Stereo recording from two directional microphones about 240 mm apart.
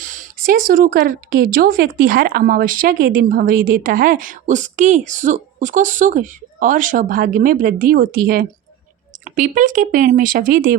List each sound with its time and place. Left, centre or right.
0.0 s speech: right